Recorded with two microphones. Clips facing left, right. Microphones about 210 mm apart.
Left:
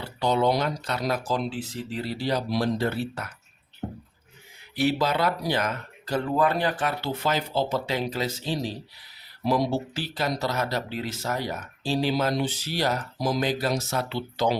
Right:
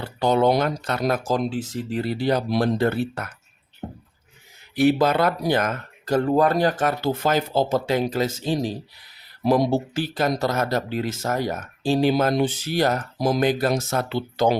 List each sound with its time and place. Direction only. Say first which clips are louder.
0.0 s speech: right 4 dB; 50° right (ahead or behind)
4.7 s speech: right 6 dB; 50° right (ahead or behind)